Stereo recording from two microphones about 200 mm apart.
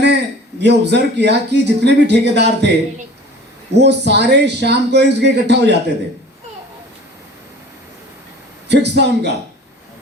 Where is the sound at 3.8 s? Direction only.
60° right (ahead or behind).